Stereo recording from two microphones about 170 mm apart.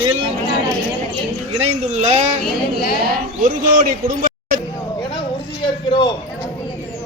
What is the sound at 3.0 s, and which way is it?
Speech, 55° right (ahead or behind).